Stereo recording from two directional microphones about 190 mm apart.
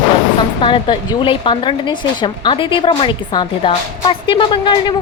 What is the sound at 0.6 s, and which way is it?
Speech, 25° left (ahead or behind).